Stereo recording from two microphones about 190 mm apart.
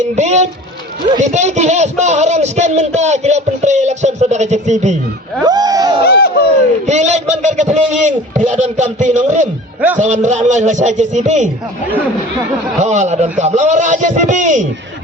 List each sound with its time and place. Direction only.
0.2 s speech: 40° right (ahead or behind)
5.5 s speech: 20° right (ahead or behind)
6.0 s a sound: 55° left (ahead or behind)
6.8 s speech: 40° right (ahead or behind)
12.8 s speech: 40° right (ahead or behind)